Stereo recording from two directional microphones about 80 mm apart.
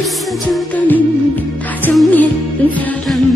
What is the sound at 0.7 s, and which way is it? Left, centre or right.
Music, left.